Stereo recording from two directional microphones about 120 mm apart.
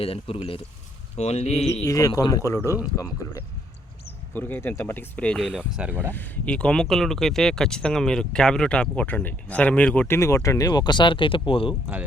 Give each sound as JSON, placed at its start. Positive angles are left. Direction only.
{"t": 0.0, "sound": "speech", "side_deg": 50}
{"t": 1.1, "sound": "speech", "side_deg": 65}
{"t": 1.9, "sound": "speech", "side_deg": 30}
{"t": 4.4, "sound": "speech", "side_deg": 15}
{"t": 5.5, "sound": "speech", "side_deg": -10}
{"t": 6.1, "sound": "speech", "side_deg": 15}
{"t": 10.2, "sound": "speech", "side_deg": 25}